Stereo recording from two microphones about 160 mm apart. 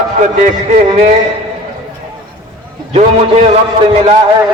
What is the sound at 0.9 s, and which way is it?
Speech, 40° right (ahead or behind).